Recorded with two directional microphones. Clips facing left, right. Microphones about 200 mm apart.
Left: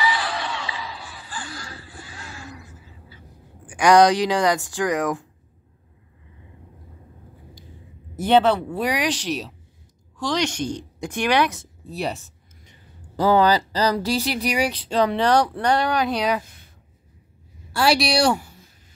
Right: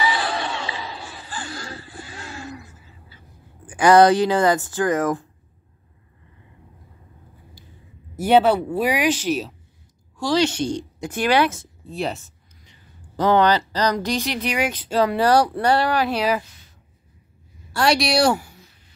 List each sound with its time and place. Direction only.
0.0 s a sound: 30° right (ahead or behind)
3.8 s speech: 5° right (ahead or behind)
8.2 s a woman's voice: 10° right (ahead or behind)
13.2 s speech: 10° left (ahead or behind)
14.9 s speech: 5° right (ahead or behind)
16.4 s a sound: 55° left (ahead or behind)
17.7 s speech: centre (ahead or behind)